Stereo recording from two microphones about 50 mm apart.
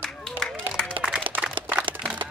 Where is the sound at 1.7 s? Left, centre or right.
Right.